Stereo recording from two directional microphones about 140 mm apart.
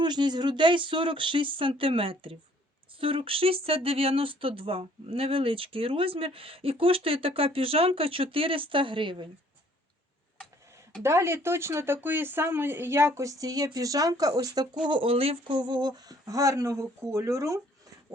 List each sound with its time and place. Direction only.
0.0 s speech: 30° right (ahead or behind)
11.0 s speech: 20° right (ahead or behind)